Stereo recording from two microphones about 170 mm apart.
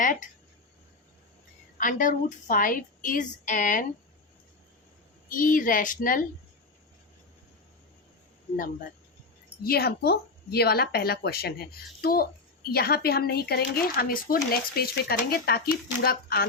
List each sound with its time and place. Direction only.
0.0 s speech: 50° left (ahead or behind)
1.8 s a woman's voice: 50° left (ahead or behind)
5.3 s a woman's voice: 50° left (ahead or behind)
9.6 s speech: 65° left (ahead or behind)